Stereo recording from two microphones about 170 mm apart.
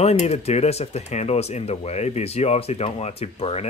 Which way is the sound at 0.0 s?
35° left (ahead or behind).